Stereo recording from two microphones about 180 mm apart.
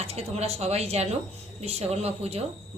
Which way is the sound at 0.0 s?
35° right (ahead or behind).